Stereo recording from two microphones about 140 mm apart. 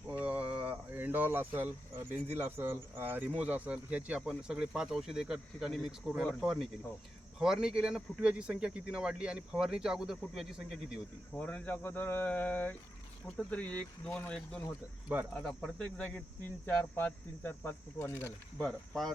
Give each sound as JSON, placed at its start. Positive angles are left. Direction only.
{"t": 0.1, "sound": "a sound", "side_deg": -10}
{"t": 2.3, "sound": "speech", "side_deg": -15}
{"t": 11.3, "sound": "speech", "side_deg": 10}
{"t": 18.6, "sound": "speech", "side_deg": 5}